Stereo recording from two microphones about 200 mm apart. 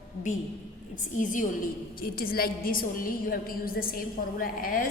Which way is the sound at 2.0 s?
45° left (ahead or behind).